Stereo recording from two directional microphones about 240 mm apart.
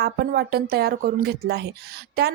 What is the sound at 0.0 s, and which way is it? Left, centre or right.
Speech, right.